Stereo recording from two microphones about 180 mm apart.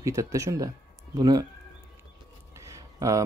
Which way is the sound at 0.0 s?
15° right (ahead or behind).